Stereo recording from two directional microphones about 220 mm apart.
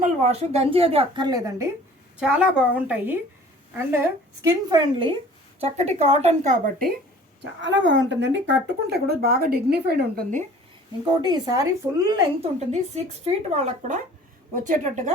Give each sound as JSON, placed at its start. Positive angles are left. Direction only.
{"t": 0.0, "sound": "a woman's voice", "side_deg": -30}
{"t": 2.1, "sound": "a woman's voice", "side_deg": -5}
{"t": 4.4, "sound": "a woman's voice", "side_deg": -20}
{"t": 7.6, "sound": "speech", "side_deg": -55}
{"t": 11.2, "sound": "speech", "side_deg": -20}
{"t": 12.4, "sound": "speech", "side_deg": -30}